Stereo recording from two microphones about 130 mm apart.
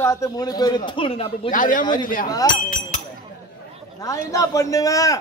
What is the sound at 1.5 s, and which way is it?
Speech, 90° left.